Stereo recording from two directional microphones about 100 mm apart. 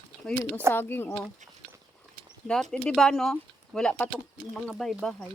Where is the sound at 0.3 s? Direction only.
10° left (ahead or behind).